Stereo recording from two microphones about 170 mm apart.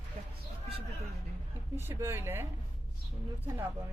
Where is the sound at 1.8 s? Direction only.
15° right (ahead or behind).